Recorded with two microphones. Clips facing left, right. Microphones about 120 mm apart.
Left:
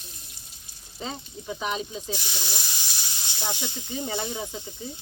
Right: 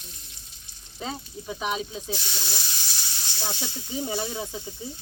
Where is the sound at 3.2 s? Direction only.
15° left (ahead or behind).